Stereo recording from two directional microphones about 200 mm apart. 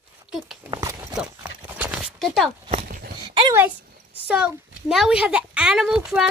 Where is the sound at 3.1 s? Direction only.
25° right (ahead or behind).